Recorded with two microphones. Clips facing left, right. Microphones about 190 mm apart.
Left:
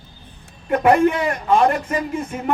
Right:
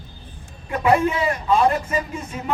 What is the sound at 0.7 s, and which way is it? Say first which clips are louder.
A man's voice: left 4 dB; 55° left (ahead or behind).